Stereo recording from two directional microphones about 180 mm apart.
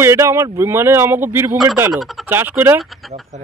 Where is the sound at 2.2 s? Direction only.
10° right (ahead or behind).